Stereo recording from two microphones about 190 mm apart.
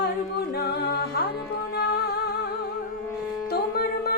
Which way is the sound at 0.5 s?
55° left (ahead or behind).